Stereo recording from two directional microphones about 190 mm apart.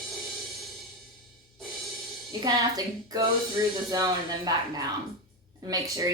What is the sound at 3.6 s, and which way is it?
Speech, 20° right (ahead or behind).